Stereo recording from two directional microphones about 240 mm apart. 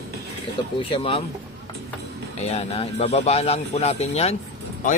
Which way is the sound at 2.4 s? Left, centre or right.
Left.